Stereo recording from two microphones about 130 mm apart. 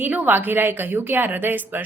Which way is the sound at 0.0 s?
15° right (ahead or behind).